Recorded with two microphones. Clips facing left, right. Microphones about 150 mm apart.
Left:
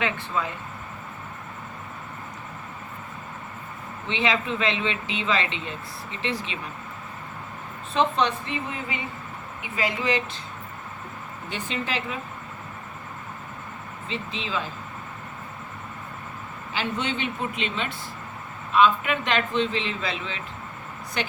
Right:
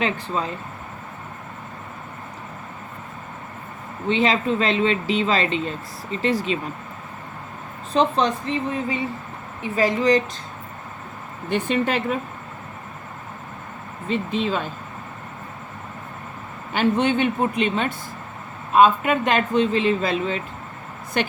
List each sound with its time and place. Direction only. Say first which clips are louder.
0.0 s speech: right 3 dB; 30° right (ahead or behind)
4.1 s speech: right 6 dB; 40° right (ahead or behind)
7.9 s speech: right 3 dB; 35° right (ahead or behind)
11.4 s speech: right 10 dB; 55° right (ahead or behind)
14.1 s speech: right 8 dB; 50° right (ahead or behind)
16.7 s speech: right 9 dB; 55° right (ahead or behind)